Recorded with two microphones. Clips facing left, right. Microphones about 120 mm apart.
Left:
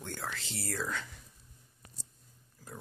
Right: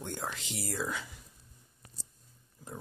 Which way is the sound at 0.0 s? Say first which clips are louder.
Right 2 dB; 15° right (ahead or behind).